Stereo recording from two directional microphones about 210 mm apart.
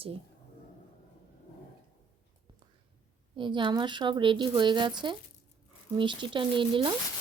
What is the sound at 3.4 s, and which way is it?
A woman's voice, 25° right (ahead or behind).